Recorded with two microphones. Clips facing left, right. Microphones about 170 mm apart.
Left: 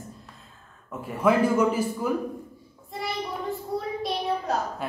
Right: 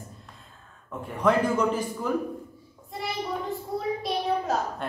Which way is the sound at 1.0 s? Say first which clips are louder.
Left 2 dB; 5° left (ahead or behind).